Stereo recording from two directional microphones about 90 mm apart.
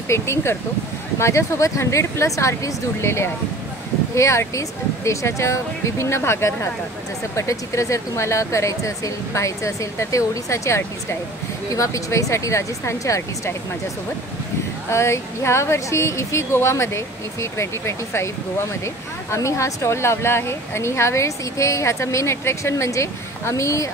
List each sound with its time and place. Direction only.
0.1 s speech: 30° left (ahead or behind)
14.9 s speech: 30° left (ahead or behind)